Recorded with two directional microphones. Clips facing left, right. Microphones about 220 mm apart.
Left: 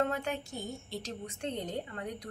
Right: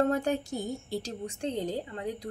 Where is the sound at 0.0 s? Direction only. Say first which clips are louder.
Right 6 dB; 35° right (ahead or behind).